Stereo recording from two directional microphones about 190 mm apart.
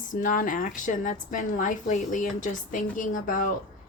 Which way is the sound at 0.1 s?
45° left (ahead or behind).